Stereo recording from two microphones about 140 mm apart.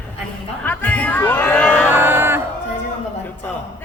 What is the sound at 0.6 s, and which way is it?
Speech, 10° left (ahead or behind).